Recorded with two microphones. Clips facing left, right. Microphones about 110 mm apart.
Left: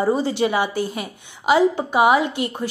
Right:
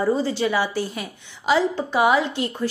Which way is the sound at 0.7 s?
50° left (ahead or behind).